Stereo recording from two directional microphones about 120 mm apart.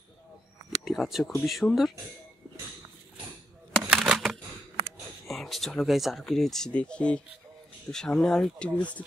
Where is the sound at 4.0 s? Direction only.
Centre (ahead or behind).